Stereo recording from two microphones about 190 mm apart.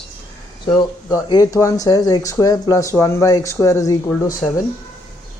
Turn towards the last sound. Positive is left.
turn(degrees=5)  # may be behind; listen again after turning